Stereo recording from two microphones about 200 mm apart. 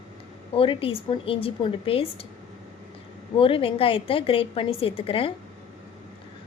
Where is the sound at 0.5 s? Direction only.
25° left (ahead or behind).